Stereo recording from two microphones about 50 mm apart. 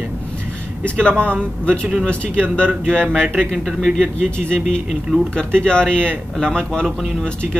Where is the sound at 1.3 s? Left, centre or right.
Centre.